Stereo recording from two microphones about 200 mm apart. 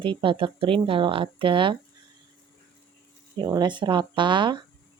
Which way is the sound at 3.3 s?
20° right (ahead or behind).